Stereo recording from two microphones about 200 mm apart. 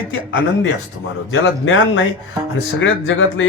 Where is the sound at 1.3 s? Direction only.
75° left (ahead or behind).